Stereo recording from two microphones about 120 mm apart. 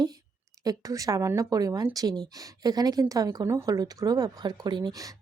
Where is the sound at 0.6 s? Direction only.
30° right (ahead or behind).